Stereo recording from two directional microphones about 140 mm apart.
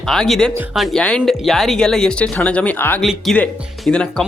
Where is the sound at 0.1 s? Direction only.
5° left (ahead or behind).